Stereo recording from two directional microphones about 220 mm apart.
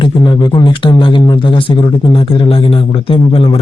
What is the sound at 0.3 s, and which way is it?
Speech, 20° left (ahead or behind).